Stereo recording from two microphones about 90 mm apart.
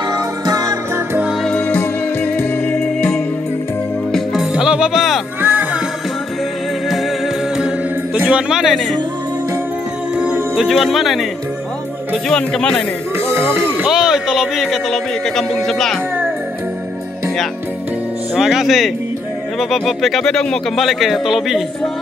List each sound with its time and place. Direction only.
0.1 s music: 45° right (ahead or behind)
1.4 s music: 10° left (ahead or behind)
2.7 s music: 10° left (ahead or behind)
4.1 s music: 5° right (ahead or behind)
5.4 s music: 20° right (ahead or behind)
7.5 s music: 10° right (ahead or behind)
8.2 s speech: 10° right (ahead or behind); by 9.0 s 5° left (ahead or behind)
10.1 s speech: 10° right (ahead or behind)
12.3 s speech: 5° left (ahead or behind)
13.2 s speech: 25° right (ahead or behind)
13.8 s speech: 5° right (ahead or behind)
18.3 s speech: 5° right (ahead or behind)